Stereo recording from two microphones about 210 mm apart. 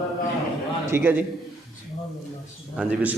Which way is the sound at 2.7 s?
5° right (ahead or behind).